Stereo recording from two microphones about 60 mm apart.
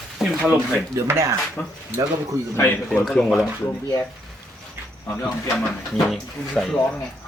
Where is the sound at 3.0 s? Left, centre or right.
Centre.